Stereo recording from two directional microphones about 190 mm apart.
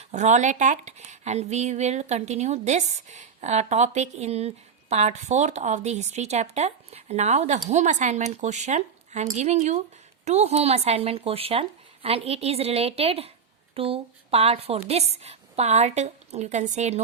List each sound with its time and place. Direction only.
0.0 s speech: 40° right (ahead or behind)